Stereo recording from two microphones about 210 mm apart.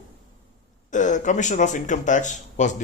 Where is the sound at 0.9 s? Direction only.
35° left (ahead or behind).